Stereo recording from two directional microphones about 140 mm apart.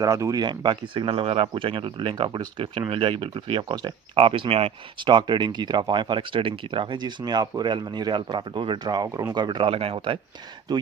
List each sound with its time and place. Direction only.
0.0 s speech: 25° right (ahead or behind); by 10.2 s 40° right (ahead or behind)